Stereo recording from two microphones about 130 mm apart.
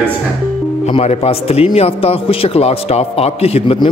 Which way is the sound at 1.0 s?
50° left (ahead or behind).